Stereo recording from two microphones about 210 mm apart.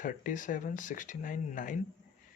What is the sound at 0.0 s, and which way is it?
Speech, 40° left (ahead or behind).